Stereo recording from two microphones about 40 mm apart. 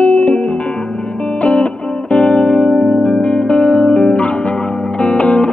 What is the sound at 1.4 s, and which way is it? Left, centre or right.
Music, left.